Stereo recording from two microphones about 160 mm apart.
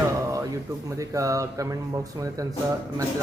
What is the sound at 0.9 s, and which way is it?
Speech, 20° right (ahead or behind).